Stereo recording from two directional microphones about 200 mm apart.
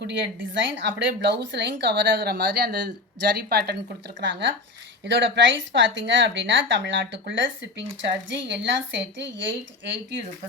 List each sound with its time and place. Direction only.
0.0 s a woman's voice: 60° right (ahead or behind)